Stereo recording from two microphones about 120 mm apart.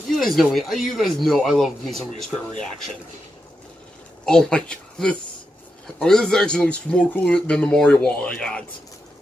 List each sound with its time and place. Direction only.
0.2 s speech: centre (ahead or behind)
4.3 s speech: 5° left (ahead or behind)